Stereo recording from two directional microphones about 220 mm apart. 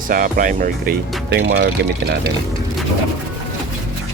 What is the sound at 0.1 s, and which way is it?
Speech, 40° right (ahead or behind).